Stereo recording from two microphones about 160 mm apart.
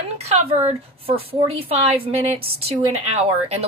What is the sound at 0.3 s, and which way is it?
A woman's voice, 40° right (ahead or behind).